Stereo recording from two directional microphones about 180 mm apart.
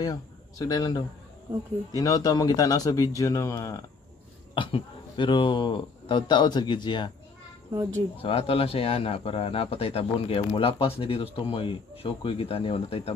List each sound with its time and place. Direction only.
0.0 s speech: 20° left (ahead or behind)
4.6 s speech: 25° left (ahead or behind)
7.7 s speech: 20° right (ahead or behind)
8.2 s speech: 30° left (ahead or behind)